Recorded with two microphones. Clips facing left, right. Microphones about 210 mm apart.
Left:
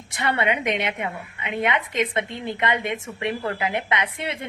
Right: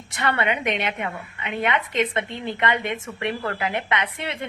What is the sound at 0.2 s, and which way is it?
A woman's voice, 25° left (ahead or behind).